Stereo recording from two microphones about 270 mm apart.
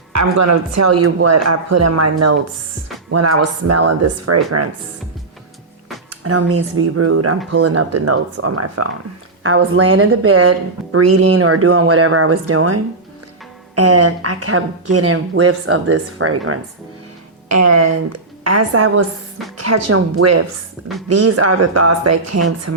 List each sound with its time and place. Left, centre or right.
0.1 s speech: right
6.1 s speech: right
17.5 s speech: right